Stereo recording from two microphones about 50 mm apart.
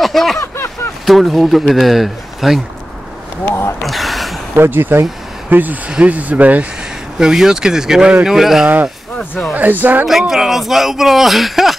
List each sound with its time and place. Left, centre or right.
0.0 s a sound: centre
1.0 s speech: centre
3.4 s speech: left
3.8 s a sound: centre
4.6 s speech: right
5.5 s speech: right
5.9 s speech: right
7.2 s speech: centre
9.2 s speech: left
9.6 s speech: right
10.0 s speech: centre